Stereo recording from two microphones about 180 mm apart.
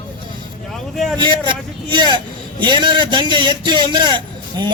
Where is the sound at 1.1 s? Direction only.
25° right (ahead or behind).